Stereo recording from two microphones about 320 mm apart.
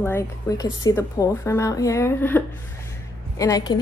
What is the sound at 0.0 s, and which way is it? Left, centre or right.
A woman's voice, centre.